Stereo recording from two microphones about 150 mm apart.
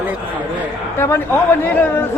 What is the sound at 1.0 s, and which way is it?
A woman's voice, 15° left (ahead or behind).